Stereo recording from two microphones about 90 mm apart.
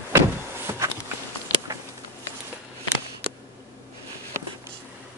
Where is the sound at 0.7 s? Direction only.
30° right (ahead or behind).